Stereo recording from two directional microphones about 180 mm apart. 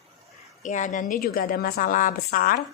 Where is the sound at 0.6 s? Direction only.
45° left (ahead or behind).